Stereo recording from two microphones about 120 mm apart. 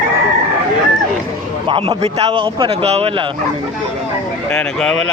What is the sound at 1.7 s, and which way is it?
Speech, 45° right (ahead or behind).